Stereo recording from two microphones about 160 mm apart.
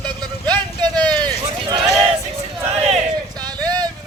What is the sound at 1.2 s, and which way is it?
Run, 25° right (ahead or behind).